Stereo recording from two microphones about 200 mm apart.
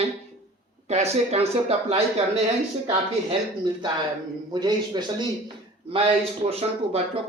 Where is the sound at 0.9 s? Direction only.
35° right (ahead or behind).